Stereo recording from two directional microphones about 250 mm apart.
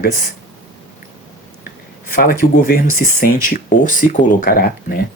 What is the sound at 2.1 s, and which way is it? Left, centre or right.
Speech, left.